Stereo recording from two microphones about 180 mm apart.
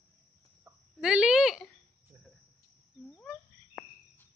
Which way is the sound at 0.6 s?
5° right (ahead or behind).